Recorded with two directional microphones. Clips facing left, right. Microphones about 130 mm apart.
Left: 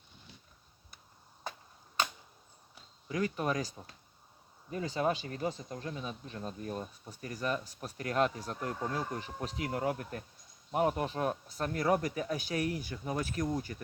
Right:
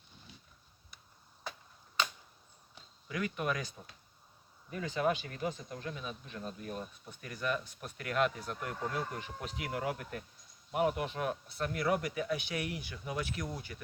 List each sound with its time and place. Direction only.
3.1 s speech: 35° left (ahead or behind)